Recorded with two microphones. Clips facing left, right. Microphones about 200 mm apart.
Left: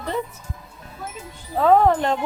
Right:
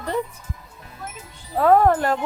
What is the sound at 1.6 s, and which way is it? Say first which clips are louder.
Speech: even; 10° right (ahead or behind).